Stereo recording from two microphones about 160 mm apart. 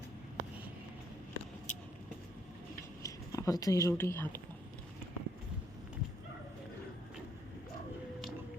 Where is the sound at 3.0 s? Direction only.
20° left (ahead or behind).